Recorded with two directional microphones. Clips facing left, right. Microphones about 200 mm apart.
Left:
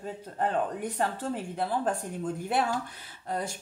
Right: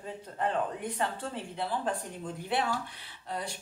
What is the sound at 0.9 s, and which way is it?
Speech, 45° left (ahead or behind).